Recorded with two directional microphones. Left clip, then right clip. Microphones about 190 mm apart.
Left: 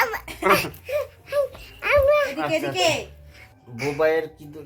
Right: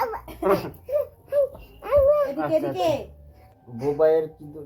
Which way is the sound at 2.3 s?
35° left (ahead or behind).